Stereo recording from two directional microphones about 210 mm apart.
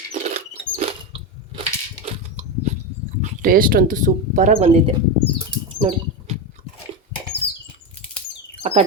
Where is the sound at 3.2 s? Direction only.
40° right (ahead or behind).